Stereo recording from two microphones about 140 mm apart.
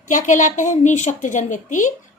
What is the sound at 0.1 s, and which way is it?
A woman's voice, 65° left (ahead or behind).